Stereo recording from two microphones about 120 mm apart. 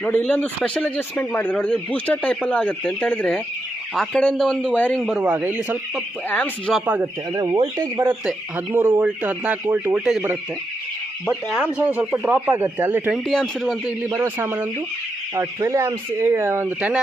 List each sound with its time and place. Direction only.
0.0 s speech: 10° left (ahead or behind); by 5.7 s 10° right (ahead or behind)
6.2 s speech: 15° left (ahead or behind)
6.7 s speech: 10° right (ahead or behind)
7.3 s speech: 30° right (ahead or behind)
8.5 s speech: 15° right (ahead or behind)
11.3 s speech: 5° right (ahead or behind)
13.1 s speech: centre (ahead or behind)
14.2 s speech: 20° right (ahead or behind)
15.4 s speech: 25° right (ahead or behind)